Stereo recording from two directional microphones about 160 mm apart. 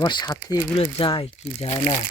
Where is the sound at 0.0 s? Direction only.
25° left (ahead or behind).